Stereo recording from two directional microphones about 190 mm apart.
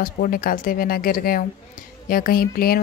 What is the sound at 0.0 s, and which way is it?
Speech, 50° left (ahead or behind).